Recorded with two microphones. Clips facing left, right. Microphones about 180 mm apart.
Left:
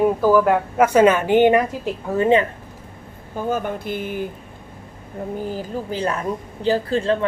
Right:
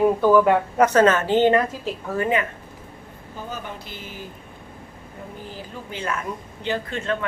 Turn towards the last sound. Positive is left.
turn(degrees=35)  # may be behind; listen again after turning